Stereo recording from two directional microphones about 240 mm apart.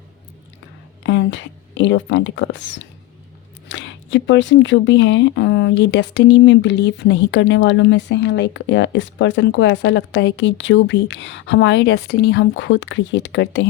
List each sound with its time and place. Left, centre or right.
1.0 s speech: left